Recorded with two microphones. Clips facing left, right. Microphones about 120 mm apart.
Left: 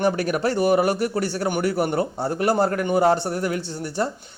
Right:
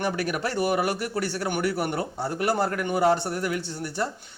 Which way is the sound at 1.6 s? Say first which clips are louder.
Left 5 dB; 40° left (ahead or behind).